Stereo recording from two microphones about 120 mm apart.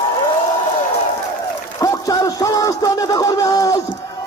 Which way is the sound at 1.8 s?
30° left (ahead or behind).